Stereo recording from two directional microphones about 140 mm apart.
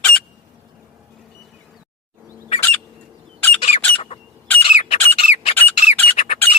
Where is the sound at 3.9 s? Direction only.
45° left (ahead or behind).